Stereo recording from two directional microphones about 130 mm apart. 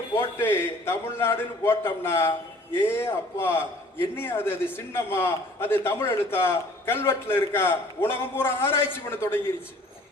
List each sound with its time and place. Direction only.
0.2 s a man's voice: 20° left (ahead or behind)